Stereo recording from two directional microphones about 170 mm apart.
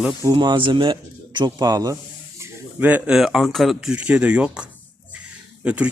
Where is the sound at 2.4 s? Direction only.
10° right (ahead or behind).